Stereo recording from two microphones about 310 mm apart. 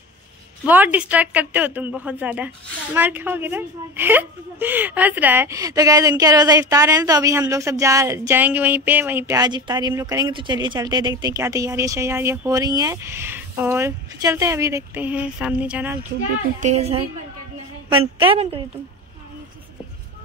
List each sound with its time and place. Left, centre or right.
0.7 s a woman's voice: centre
16.5 s a woman's voice: right